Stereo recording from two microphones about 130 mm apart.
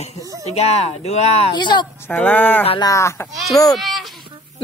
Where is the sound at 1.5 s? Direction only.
35° left (ahead or behind).